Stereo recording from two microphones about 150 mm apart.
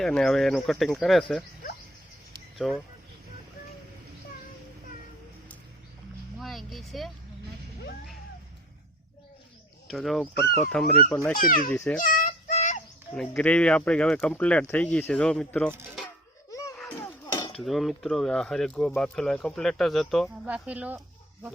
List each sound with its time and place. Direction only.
0.0 s speech: 5° left (ahead or behind)
2.6 s speech: centre (ahead or behind)
6.4 s vehicle: centre (ahead or behind)
9.8 s speech: centre (ahead or behind)
11.3 s a child's voice: 65° left (ahead or behind)
11.7 s speech: 10° left (ahead or behind)
11.9 s child singing: 60° left (ahead or behind)
13.1 s speech: 5° left (ahead or behind)
16.5 s a sound: 20° left (ahead or behind)
17.6 s speech: centre (ahead or behind)
20.5 s speech: 10° right (ahead or behind)